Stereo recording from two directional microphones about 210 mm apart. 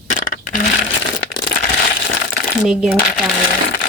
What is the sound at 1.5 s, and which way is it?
Crushing, 40° left (ahead or behind).